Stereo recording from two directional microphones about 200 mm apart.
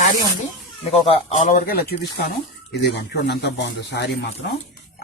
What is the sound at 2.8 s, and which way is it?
Speech, 55° left (ahead or behind).